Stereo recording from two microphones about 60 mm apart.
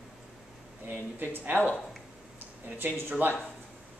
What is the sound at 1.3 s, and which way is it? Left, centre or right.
Speech, right.